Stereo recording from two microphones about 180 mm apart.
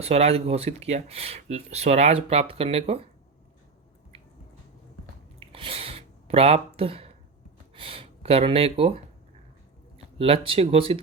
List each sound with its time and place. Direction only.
0.0 s speech: 35° right (ahead or behind)
5.5 s a sound: 30° right (ahead or behind)
7.8 s speech: 30° right (ahead or behind)
10.2 s speech: 30° right (ahead or behind)